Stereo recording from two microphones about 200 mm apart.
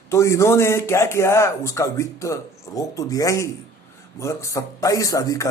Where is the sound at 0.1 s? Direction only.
15° left (ahead or behind).